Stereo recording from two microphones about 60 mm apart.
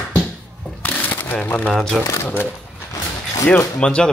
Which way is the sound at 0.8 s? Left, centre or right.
Left.